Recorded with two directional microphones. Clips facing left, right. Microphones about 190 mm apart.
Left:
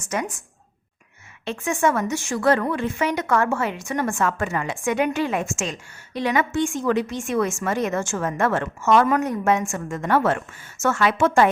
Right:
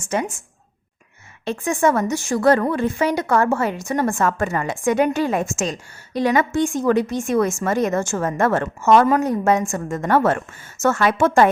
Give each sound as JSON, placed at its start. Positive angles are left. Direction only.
{"t": 0.0, "sound": "a woman's voice", "side_deg": -30}
{"t": 1.5, "sound": "a woman's voice", "side_deg": -35}